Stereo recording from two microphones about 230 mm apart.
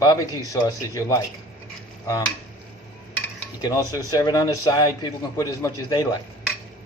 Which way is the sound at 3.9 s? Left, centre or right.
Centre.